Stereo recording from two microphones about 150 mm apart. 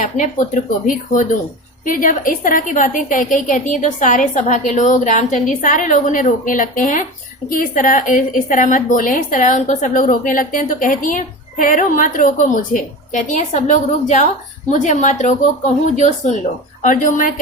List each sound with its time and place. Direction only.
0.0 s a woman's voice: 55° left (ahead or behind)